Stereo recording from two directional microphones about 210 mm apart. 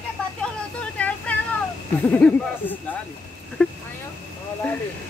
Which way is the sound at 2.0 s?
10° left (ahead or behind).